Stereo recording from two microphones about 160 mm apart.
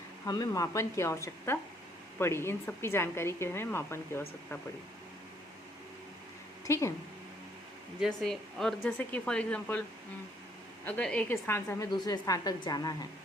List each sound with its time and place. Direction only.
0.3 s a woman's voice: 25° left (ahead or behind)
6.7 s speech: 20° left (ahead or behind)
8.0 s a woman's voice: centre (ahead or behind)
10.8 s a woman's voice: 10° left (ahead or behind); by 13.1 s 25° left (ahead or behind)